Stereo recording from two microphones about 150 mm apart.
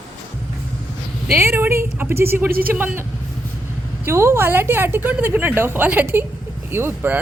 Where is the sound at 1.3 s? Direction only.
15° right (ahead or behind).